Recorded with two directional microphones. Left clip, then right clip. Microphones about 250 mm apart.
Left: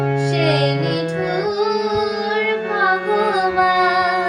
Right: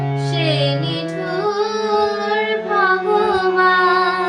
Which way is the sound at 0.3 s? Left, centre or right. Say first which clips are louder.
Even; centre.